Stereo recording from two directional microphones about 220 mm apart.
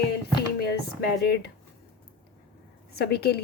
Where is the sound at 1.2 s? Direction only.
50° left (ahead or behind).